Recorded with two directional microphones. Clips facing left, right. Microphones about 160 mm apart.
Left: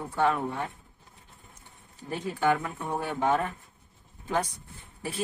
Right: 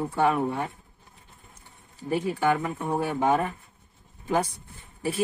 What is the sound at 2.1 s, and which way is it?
Speech, 10° right (ahead or behind).